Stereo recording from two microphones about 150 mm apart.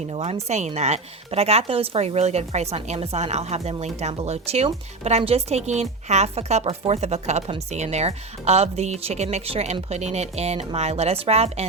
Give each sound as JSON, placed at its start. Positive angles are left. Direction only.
{"t": 0.1, "sound": "speech", "side_deg": -40}